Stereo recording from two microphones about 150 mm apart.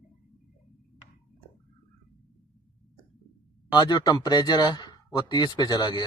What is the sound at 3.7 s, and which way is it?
Speech, 30° left (ahead or behind).